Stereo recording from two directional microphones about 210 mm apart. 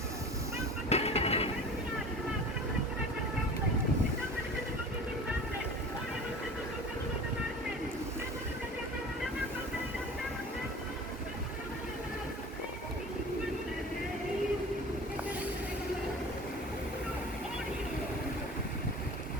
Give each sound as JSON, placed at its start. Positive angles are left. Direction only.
{"t": 0.9, "sound": "vehicle", "side_deg": 30}